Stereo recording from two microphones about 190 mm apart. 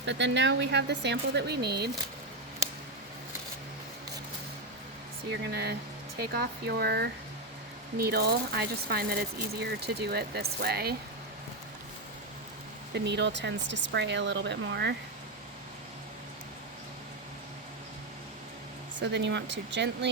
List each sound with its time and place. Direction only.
0.0 s speech: 70° right (ahead or behind)
5.5 s speech: 55° right (ahead or behind)
12.9 s speech: 65° right (ahead or behind)
18.9 s speech: 70° right (ahead or behind)